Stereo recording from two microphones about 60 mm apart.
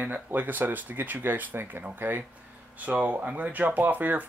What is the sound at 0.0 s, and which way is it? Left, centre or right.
Speech, right.